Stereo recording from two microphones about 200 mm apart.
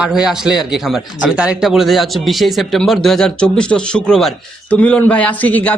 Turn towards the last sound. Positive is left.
turn(degrees=10)  # may be behind; listen again after turning